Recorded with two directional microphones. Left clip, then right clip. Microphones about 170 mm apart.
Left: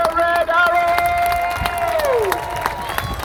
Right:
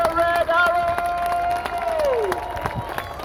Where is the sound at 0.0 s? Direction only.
60° right (ahead or behind).